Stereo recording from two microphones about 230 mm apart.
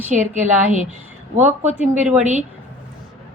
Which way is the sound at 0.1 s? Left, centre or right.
Right.